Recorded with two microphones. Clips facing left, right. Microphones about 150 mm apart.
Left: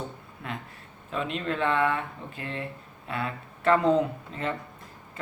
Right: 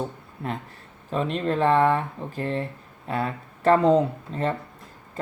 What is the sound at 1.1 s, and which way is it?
Speech, 35° right (ahead or behind).